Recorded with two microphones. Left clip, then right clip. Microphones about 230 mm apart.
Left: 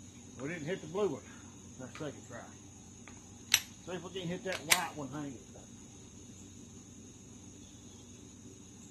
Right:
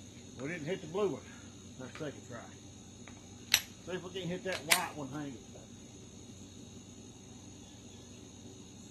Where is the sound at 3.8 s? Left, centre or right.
Centre.